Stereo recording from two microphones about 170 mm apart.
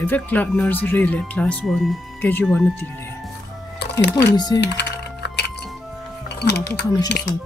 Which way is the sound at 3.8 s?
85° left.